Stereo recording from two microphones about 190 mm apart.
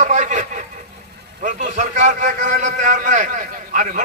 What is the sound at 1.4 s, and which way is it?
A man's voice, 40° right (ahead or behind).